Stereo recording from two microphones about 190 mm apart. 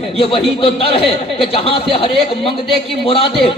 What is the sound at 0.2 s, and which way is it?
Speech, 30° left (ahead or behind).